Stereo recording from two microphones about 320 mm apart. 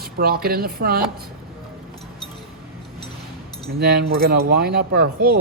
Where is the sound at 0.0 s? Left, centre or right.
Right.